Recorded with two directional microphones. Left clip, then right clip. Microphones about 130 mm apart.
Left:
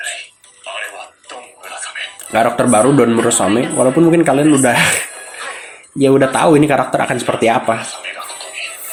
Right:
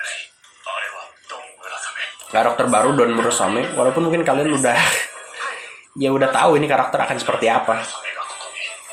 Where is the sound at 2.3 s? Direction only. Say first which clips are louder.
Left 4 dB; 45° left (ahead or behind).